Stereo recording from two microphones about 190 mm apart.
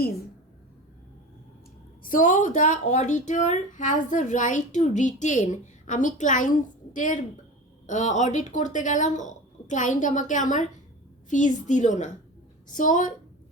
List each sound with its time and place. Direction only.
2.0 s a woman's voice: 40° left (ahead or behind)